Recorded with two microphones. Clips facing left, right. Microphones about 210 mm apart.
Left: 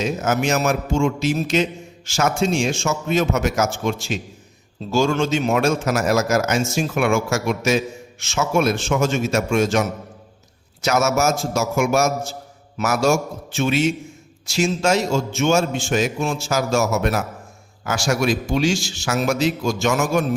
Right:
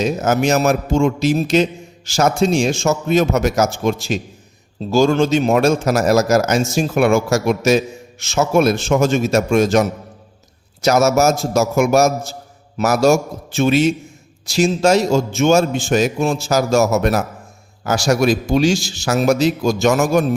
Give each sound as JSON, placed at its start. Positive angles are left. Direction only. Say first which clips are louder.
{"t": 0.0, "sound": "a man's voice", "louder": "right 4 dB", "side_deg": -40}